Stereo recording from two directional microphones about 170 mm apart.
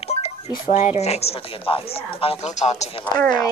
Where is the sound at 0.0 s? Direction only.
35° left (ahead or behind).